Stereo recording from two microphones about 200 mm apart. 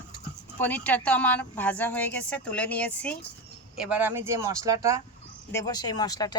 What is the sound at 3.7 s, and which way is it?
Speech, 5° right (ahead or behind).